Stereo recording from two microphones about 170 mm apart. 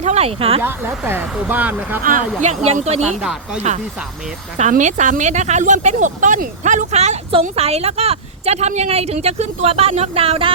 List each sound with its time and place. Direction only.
0.0 s speech: 40° right (ahead or behind)
0.6 s speech: 10° right (ahead or behind)
2.0 s speech: 45° right (ahead or behind)
3.2 s speech: 5° right (ahead or behind)
4.5 s speech: 45° right (ahead or behind)